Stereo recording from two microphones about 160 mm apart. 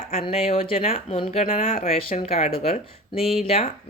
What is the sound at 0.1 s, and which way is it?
Speech, 40° left (ahead or behind).